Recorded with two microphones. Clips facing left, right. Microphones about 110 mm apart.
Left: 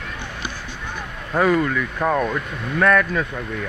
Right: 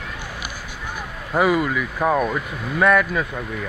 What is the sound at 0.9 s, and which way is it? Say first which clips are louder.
Speech: even; 10° right (ahead or behind).